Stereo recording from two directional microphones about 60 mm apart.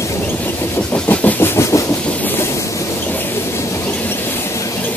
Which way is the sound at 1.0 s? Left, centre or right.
Left.